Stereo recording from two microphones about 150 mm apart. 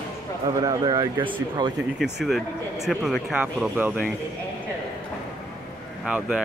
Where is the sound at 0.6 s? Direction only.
25° right (ahead or behind).